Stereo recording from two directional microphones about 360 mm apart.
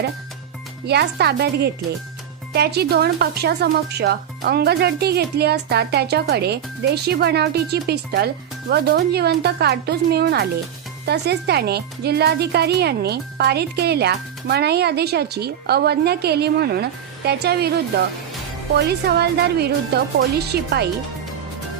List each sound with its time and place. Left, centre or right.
0.9 s speech: right
18.9 s speech: right